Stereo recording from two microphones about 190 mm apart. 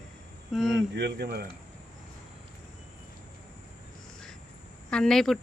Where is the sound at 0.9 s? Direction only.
60° right (ahead or behind).